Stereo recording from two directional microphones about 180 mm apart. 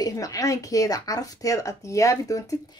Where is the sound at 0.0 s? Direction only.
20° left (ahead or behind).